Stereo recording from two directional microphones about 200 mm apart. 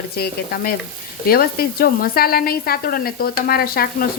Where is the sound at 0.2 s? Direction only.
45° left (ahead or behind).